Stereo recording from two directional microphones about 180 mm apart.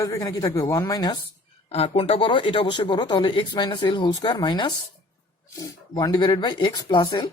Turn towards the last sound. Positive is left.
turn(degrees=25)  # may be behind; listen again after turning